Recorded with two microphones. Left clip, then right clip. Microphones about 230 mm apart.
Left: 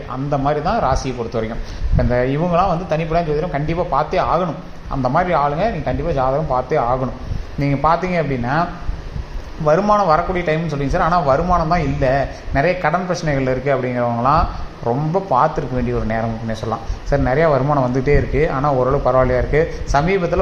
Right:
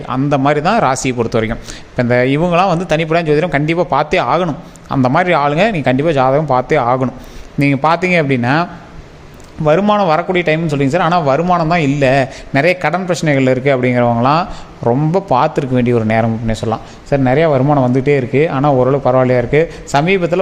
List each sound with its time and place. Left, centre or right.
0.1 s speech: right
9.6 s speech: right